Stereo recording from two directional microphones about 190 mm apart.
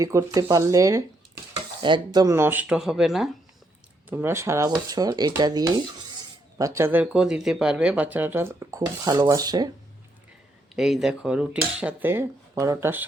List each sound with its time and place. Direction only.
0.0 s speech: 15° right (ahead or behind)
4.1 s speech: 10° right (ahead or behind)
10.8 s speech: centre (ahead or behind)